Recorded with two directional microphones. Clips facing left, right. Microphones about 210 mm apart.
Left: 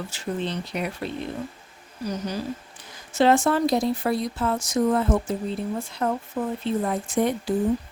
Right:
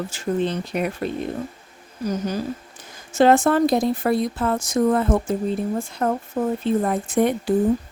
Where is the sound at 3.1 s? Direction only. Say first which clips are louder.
Right 4 dB; 50° right (ahead or behind).